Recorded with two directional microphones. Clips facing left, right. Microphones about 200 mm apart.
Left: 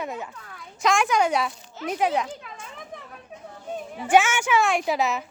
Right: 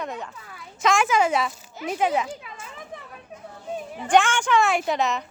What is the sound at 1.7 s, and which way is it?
Children playing, 5° right (ahead or behind).